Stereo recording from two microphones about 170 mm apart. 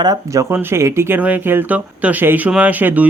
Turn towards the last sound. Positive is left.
turn(degrees=-10)  # may be behind; listen again after turning